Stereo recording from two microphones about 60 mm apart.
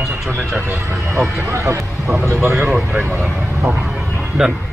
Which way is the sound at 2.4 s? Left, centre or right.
Right.